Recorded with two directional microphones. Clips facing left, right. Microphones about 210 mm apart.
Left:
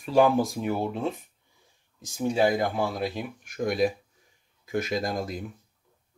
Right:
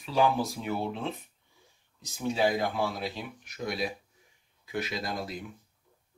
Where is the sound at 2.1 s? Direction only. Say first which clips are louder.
Left 4 dB; 50° left (ahead or behind).